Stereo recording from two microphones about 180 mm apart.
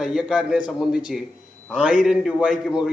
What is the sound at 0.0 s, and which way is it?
A man's voice, 5° right (ahead or behind).